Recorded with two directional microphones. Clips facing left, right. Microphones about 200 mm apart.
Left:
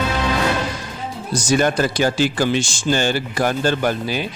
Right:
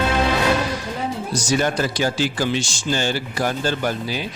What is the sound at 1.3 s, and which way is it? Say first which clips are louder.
Speech: left 5 dB; 50° left (ahead or behind).